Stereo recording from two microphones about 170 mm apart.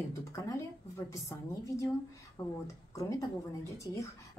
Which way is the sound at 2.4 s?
25° left (ahead or behind).